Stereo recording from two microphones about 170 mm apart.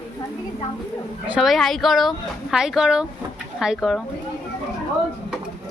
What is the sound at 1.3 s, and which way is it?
Speech, centre (ahead or behind).